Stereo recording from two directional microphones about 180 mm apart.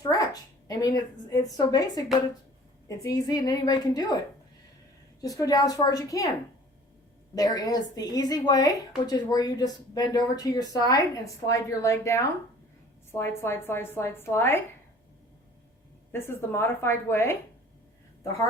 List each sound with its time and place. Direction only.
0.0 s a sound: 20° left (ahead or behind)
0.7 s speech: 20° left (ahead or behind)
5.2 s speech: 20° left (ahead or behind)
7.3 s a woman's voice: 20° left (ahead or behind)
16.1 s a woman's voice: 15° left (ahead or behind)